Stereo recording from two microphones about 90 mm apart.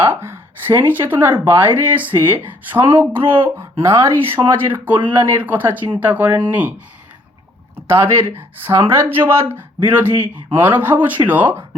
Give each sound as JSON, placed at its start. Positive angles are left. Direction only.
{"t": 0.0, "sound": "speech", "side_deg": -25}
{"t": 7.8, "sound": "speech", "side_deg": -25}